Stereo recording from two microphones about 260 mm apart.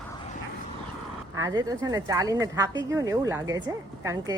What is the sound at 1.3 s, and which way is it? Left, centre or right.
Speech, centre.